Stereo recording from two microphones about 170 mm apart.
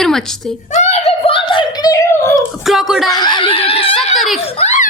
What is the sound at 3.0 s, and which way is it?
Giggle, 25° left (ahead or behind).